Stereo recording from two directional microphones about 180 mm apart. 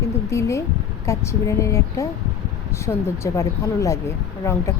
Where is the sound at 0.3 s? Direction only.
15° left (ahead or behind).